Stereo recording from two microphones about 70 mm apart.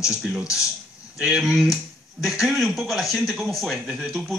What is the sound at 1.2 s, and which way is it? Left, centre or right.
Speech, centre.